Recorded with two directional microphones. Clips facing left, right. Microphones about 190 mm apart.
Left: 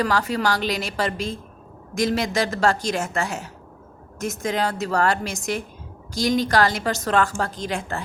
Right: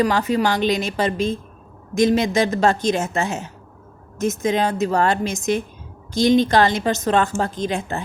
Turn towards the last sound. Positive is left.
turn(degrees=-20)  # may be behind; listen again after turning